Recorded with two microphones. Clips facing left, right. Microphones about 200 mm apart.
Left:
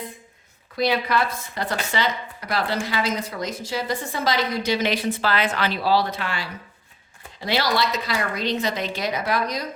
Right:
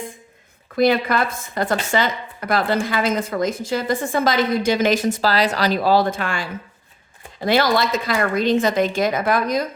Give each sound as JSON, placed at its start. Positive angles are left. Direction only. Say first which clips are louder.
{"t": 0.8, "sound": "speech", "louder": "right 5 dB", "side_deg": -50}